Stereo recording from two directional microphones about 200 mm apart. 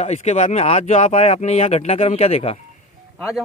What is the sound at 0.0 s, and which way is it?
Speech, 35° left (ahead or behind).